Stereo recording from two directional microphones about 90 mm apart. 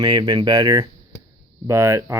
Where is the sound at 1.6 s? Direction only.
30° right (ahead or behind).